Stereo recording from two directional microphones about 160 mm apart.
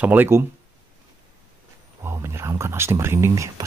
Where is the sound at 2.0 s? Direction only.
15° right (ahead or behind).